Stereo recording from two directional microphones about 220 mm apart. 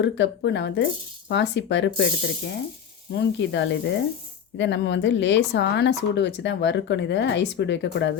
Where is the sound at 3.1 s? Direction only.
55° left (ahead or behind).